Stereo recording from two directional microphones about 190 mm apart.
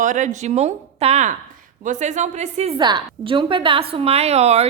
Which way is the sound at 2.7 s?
25° right (ahead or behind).